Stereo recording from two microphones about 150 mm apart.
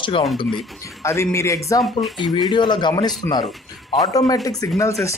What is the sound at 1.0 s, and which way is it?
Speech, 20° left (ahead or behind).